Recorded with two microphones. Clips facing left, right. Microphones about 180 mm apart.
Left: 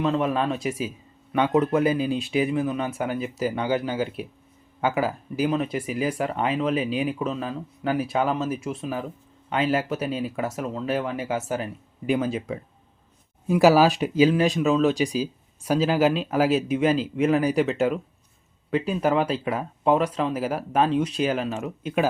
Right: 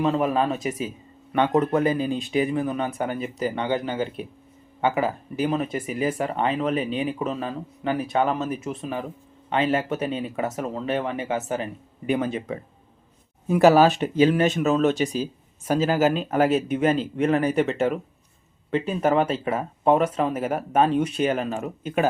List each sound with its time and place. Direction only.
0.0 s speech: 5° right (ahead or behind)